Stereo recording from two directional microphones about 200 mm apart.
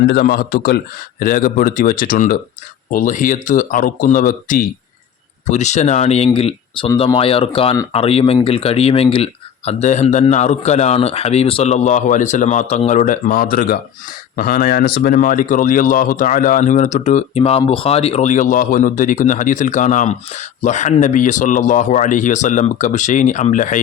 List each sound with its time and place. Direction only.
0.0 s speech: 55° left (ahead or behind)